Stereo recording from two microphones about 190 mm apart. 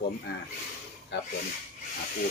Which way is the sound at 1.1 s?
65° left (ahead or behind).